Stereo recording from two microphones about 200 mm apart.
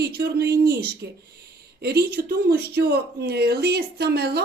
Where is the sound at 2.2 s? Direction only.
55° right (ahead or behind).